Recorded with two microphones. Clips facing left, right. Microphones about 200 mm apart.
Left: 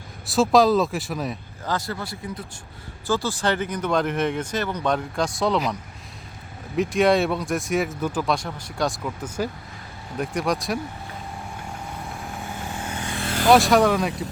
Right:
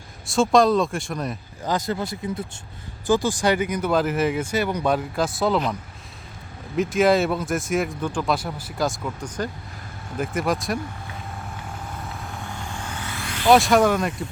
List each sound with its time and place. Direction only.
0.3 s speech: centre (ahead or behind)
1.6 s speech: 20° right (ahead or behind); by 5.7 s centre (ahead or behind)
6.7 s speech: centre (ahead or behind)
12.4 s vehicle: 15° left (ahead or behind)
13.5 s speech: centre (ahead or behind)